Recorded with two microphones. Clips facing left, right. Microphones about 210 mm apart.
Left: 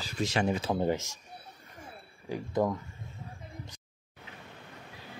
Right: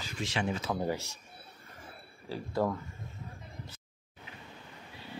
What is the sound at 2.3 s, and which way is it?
Speech, 15° left (ahead or behind).